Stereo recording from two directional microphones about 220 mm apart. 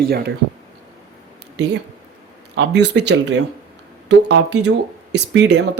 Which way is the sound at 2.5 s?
50° right (ahead or behind).